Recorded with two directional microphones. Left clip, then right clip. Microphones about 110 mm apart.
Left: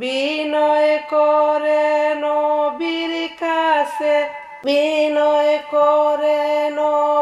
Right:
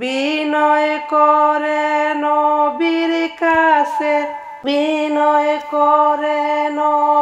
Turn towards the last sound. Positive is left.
turn(degrees=-25)  # may be behind; listen again after turning